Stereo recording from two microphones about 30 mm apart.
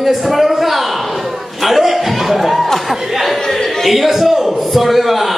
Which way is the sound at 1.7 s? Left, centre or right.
Centre.